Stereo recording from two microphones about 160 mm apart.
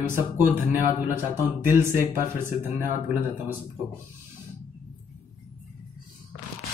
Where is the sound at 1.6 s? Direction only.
15° right (ahead or behind).